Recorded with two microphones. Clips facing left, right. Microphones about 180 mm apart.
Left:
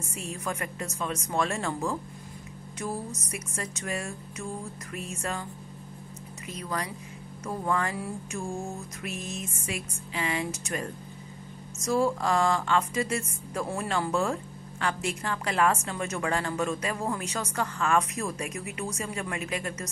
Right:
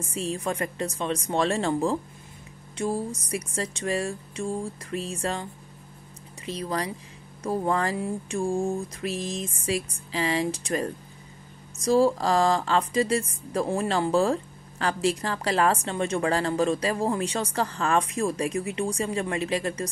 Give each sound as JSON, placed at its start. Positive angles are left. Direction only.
{"t": 0.1, "sound": "a woman's voice", "side_deg": -30}